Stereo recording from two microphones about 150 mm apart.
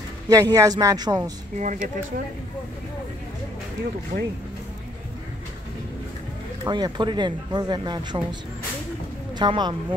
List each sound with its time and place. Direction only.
0.3 s a man's voice: 25° right (ahead or behind)
1.6 s speech: 55° right (ahead or behind)
6.6 s a man's voice: 30° right (ahead or behind)